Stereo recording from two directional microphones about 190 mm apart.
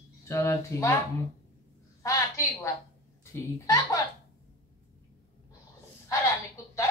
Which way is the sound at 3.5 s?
15° left (ahead or behind).